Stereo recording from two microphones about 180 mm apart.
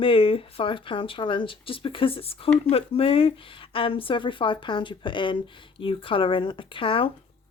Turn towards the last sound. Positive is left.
turn(degrees=30)  # may be behind; listen again after turning